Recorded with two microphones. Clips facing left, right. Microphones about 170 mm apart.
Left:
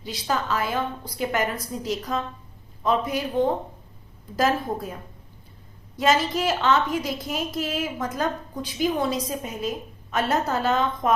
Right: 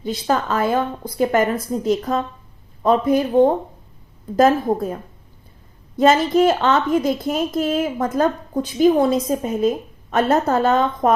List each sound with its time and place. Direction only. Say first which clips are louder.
0.0 s a woman's voice: right 6 dB; 50° right (ahead or behind)
6.0 s a woman's voice: right 8 dB; 50° right (ahead or behind)